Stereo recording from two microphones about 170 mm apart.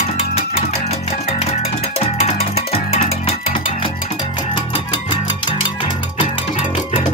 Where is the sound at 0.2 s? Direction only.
40° left (ahead or behind).